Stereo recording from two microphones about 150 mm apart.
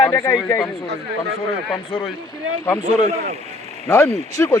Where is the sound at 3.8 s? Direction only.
15° left (ahead or behind).